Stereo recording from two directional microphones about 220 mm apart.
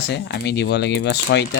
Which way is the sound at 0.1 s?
50° left (ahead or behind).